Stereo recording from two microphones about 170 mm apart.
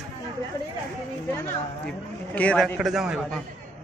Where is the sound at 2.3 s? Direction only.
5° left (ahead or behind).